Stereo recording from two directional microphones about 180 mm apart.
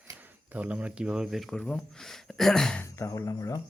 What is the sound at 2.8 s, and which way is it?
Speech, 15° left (ahead or behind).